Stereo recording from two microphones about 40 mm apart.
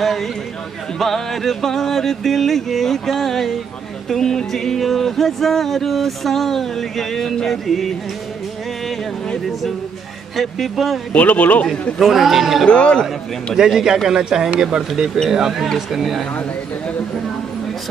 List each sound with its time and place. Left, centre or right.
0.0 s speech: centre
0.9 s music: centre
10.3 s speech: centre
11.1 s speech: left
12.0 s speech: centre
12.6 s speech: left
13.6 s speech: centre
16.0 s speech: centre